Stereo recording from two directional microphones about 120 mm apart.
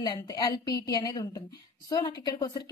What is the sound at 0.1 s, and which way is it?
A woman's voice, 30° left (ahead or behind).